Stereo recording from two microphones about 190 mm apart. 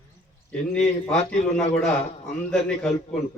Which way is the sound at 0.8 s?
35° left (ahead or behind).